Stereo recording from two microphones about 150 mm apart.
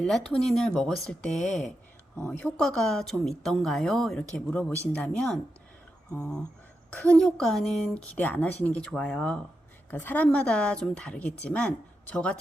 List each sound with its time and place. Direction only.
0.0 s a woman's voice: 5° left (ahead or behind)